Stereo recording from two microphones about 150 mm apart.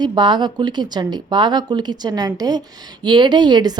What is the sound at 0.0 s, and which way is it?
Speech, 30° right (ahead or behind).